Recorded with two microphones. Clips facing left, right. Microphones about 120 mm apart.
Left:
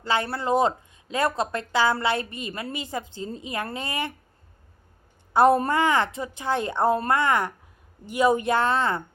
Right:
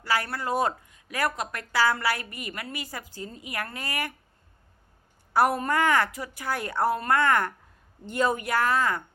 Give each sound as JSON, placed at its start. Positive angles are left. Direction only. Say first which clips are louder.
{"t": 0.0, "sound": "speech", "louder": "left 3 dB", "side_deg": 25}
{"t": 5.3, "sound": "a woman's voice", "louder": "left 5 dB", "side_deg": 20}
{"t": 8.4, "sound": "speech", "louder": "left 2 dB", "side_deg": 25}